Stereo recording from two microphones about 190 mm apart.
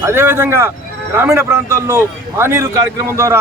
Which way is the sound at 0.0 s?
10° right (ahead or behind).